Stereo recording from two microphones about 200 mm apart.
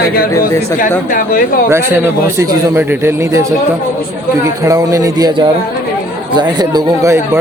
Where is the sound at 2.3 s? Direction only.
10° right (ahead or behind).